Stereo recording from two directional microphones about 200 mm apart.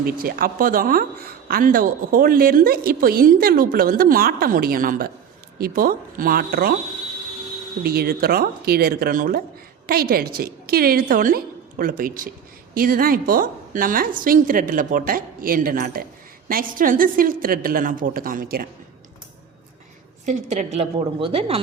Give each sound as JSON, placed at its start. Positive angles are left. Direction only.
{"t": 0.0, "sound": "speech", "side_deg": -45}
{"t": 7.9, "sound": "speech", "side_deg": -50}
{"t": 20.2, "sound": "a woman's voice", "side_deg": -35}